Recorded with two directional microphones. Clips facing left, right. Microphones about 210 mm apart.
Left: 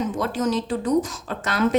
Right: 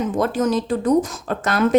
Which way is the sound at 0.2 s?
50° right (ahead or behind).